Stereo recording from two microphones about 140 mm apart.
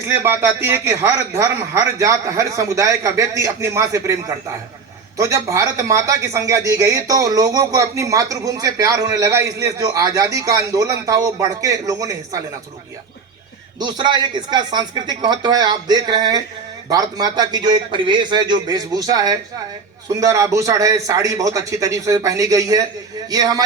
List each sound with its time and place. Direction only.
0.1 s speech: 15° right (ahead or behind)
13.7 s speech: 30° right (ahead or behind)